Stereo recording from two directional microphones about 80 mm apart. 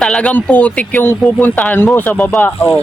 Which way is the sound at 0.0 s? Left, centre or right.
Centre.